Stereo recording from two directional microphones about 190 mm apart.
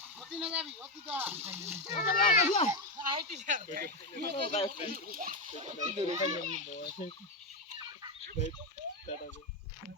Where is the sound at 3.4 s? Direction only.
45° right (ahead or behind).